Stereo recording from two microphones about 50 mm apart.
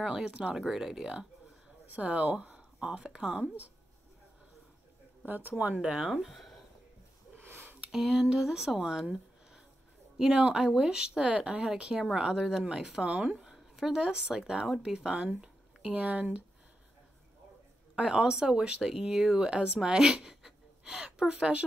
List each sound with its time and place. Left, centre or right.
0.0 s speech: centre
0.6 s speech: centre
1.9 s speech: right
5.2 s speech: right
5.8 s speech: centre
6.1 s speech: centre
7.4 s sniff: right
7.9 s speech: centre
10.1 s speech: centre
11.6 s speech: centre
13.0 s speech: right
13.4 s speech: centre; by 16.4 s right
18.0 s speech: centre